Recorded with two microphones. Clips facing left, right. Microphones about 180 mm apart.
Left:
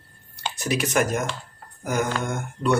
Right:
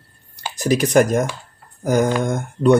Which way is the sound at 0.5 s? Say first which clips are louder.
Right 8 dB; 35° right (ahead or behind).